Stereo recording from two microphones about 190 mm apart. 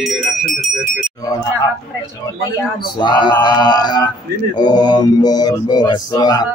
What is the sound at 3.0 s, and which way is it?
Speech, 25° left (ahead or behind).